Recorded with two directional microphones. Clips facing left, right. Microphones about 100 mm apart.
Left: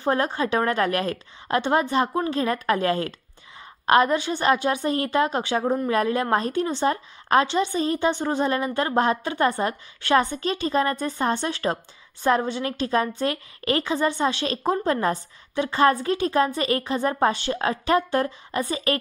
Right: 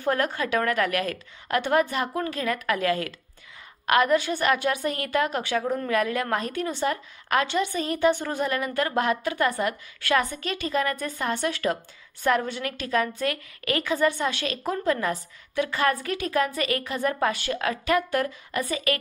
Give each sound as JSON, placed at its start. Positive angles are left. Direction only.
{"t": 0.0, "sound": "a woman's voice", "side_deg": 25}